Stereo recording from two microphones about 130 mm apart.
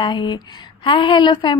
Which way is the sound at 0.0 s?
35° left (ahead or behind).